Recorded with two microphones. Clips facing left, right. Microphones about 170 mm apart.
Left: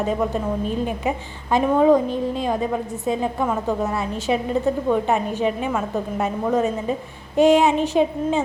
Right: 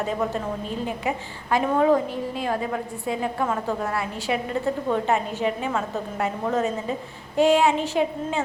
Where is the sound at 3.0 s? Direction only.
20° left (ahead or behind).